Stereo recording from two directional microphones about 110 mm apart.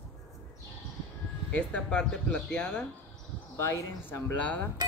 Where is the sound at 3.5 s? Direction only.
25° left (ahead or behind).